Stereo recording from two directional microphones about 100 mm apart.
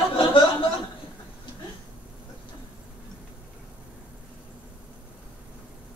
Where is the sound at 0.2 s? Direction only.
60° left (ahead or behind).